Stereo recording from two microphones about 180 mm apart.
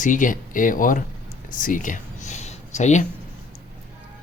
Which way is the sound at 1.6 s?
50° left (ahead or behind).